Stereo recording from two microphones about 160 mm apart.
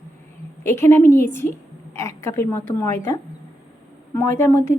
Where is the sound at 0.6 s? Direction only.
15° left (ahead or behind).